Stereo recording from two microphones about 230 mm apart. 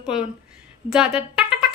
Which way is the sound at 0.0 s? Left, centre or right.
Centre.